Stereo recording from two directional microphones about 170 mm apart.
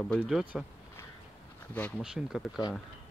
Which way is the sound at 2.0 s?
5° right (ahead or behind).